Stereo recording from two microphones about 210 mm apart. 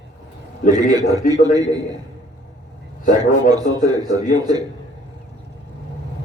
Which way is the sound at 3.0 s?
40° left (ahead or behind).